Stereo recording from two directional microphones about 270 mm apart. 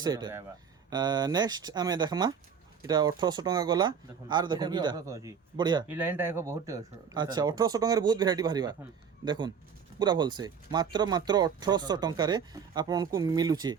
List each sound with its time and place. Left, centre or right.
0.0 s speech: centre